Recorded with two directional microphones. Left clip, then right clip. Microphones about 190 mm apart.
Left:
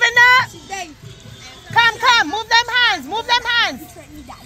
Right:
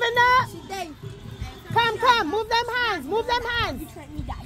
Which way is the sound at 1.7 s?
5° right (ahead or behind).